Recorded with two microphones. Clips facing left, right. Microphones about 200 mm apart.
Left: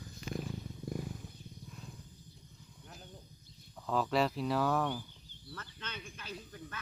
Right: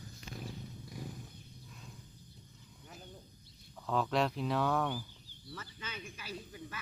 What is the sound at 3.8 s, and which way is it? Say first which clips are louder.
Speech: left 1 dB; centre (ahead or behind).